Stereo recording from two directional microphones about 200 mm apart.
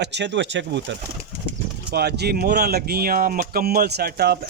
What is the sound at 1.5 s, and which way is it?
Speech, 55° right (ahead or behind).